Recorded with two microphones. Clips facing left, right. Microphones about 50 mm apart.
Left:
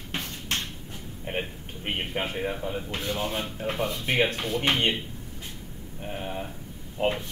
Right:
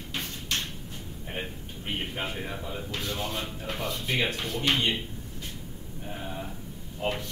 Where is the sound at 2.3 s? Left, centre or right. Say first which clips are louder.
Left 5 dB; left.